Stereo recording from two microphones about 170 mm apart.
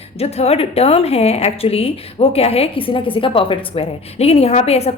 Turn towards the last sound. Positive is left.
turn(degrees=40)  # may be behind; listen again after turning